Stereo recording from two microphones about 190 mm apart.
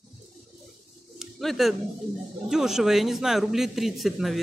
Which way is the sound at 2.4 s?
5° right (ahead or behind).